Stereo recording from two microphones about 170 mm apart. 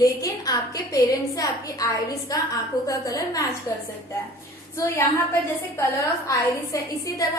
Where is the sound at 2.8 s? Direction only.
20° left (ahead or behind).